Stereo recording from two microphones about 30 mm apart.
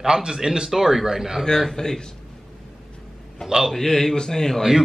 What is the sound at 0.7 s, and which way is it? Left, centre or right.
Speech, centre.